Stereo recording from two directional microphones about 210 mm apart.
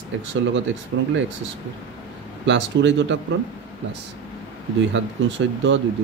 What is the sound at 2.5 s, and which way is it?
Speech, 60° right (ahead or behind).